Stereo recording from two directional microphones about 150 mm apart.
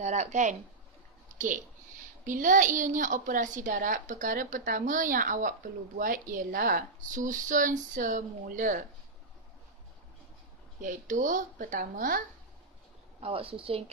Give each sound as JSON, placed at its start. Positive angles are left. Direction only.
{"t": 0.0, "sound": "speech", "side_deg": -50}
{"t": 1.3, "sound": "a sound", "side_deg": -55}
{"t": 2.2, "sound": "a woman's voice", "side_deg": -60}
{"t": 10.8, "sound": "a woman's voice", "side_deg": -60}
{"t": 13.2, "sound": "speech", "side_deg": -40}